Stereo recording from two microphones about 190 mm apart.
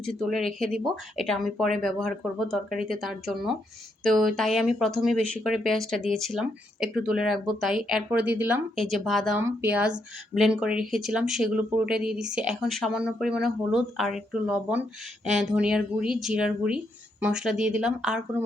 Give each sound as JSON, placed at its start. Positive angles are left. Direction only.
{"t": 0.0, "sound": "speech", "side_deg": 0}
{"t": 8.7, "sound": "speech", "side_deg": 0}